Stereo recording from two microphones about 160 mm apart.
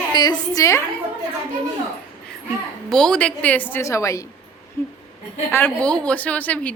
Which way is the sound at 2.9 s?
5° left (ahead or behind).